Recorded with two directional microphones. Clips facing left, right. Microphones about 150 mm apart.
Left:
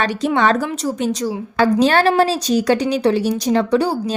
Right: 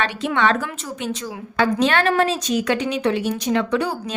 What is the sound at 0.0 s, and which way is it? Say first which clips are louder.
A woman's voice: left 4 dB; 40° left (ahead or behind).